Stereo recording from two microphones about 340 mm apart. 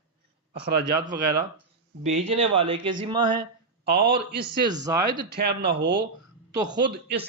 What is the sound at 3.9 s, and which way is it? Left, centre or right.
Speech, right.